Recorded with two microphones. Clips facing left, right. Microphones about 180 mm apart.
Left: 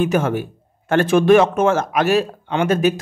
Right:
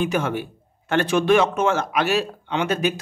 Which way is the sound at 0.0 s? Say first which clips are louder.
Left 5 dB; 45° left (ahead or behind).